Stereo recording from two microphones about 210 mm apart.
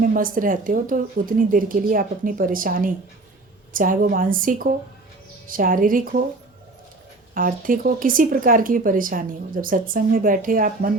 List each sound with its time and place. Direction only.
0.0 s speech: 40° right (ahead or behind)
7.3 s speech: 40° right (ahead or behind)